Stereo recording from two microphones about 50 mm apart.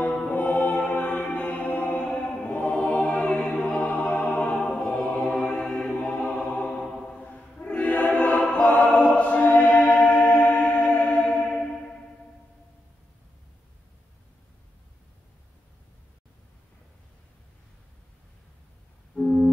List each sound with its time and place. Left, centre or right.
0.0 s music: left
2.0 s mantra: centre
2.5 s music: left
4.8 s music: left
5.6 s music: centre
5.9 s music: left
7.1 s a sound: left
7.8 s choir: left
8.6 s music: left
8.9 s choir: centre
9.2 s choir: left
9.7 s music: left
19.1 s busy signal: centre